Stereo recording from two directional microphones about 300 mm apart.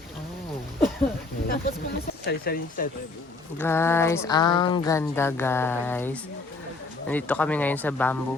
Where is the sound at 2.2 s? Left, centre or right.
Left.